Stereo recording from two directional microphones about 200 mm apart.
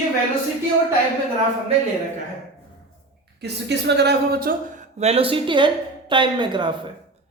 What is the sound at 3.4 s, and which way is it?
A woman's voice, 55° right (ahead or behind).